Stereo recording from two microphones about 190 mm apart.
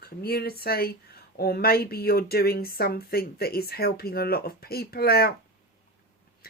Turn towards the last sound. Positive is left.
turn(degrees=55)  # may be behind; listen again after turning